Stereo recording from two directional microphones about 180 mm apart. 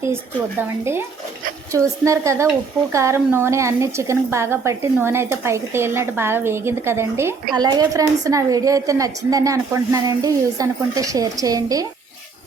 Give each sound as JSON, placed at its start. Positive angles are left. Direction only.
{"t": 1.7, "sound": "a woman's voice", "side_deg": -15}